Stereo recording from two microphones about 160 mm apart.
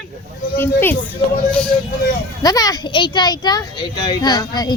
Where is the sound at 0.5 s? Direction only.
15° left (ahead or behind).